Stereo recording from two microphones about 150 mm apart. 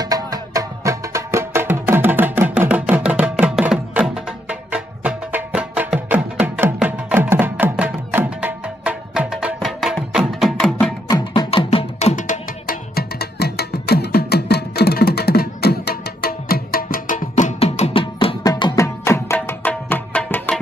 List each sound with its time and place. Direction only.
0.0 s music: 25° right (ahead or behind); by 10.9 s 5° left (ahead or behind)
11.1 s music: 30° left (ahead or behind)
18.4 s music: 25° left (ahead or behind); by 20.6 s 10° left (ahead or behind)